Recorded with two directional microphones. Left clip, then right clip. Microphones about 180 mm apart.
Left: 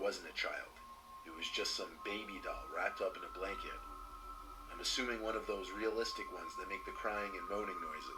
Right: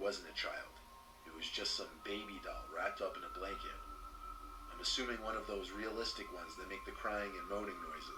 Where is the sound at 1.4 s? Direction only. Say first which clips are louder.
Left 1 dB; 30° left (ahead or behind).